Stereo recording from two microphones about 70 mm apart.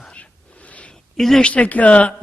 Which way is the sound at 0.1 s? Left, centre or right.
Centre.